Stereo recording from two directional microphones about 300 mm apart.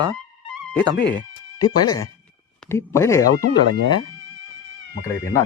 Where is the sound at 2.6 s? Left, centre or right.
Centre.